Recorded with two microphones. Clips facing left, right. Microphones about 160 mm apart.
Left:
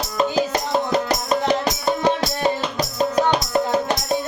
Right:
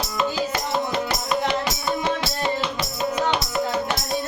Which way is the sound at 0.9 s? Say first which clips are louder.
Left 4 dB; 40° left (ahead or behind).